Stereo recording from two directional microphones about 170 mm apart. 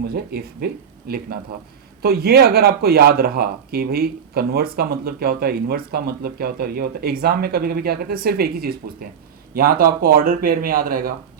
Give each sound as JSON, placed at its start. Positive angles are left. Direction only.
{"t": 0.1, "sound": "speech", "side_deg": -70}